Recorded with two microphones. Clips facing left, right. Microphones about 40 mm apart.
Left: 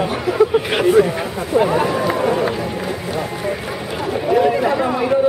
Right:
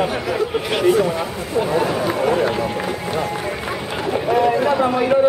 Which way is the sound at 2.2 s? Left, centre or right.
Centre.